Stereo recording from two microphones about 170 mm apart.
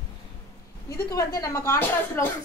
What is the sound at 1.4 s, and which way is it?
Speech, 15° left (ahead or behind).